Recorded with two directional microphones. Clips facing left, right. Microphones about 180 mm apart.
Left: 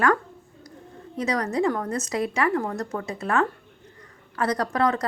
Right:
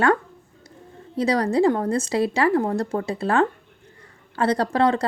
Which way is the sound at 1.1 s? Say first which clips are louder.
Right 5 dB; 30° right (ahead or behind).